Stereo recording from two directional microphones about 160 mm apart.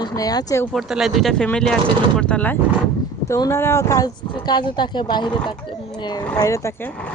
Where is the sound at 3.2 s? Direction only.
20° left (ahead or behind).